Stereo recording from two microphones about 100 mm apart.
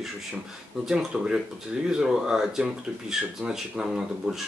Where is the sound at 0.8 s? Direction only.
5° right (ahead or behind).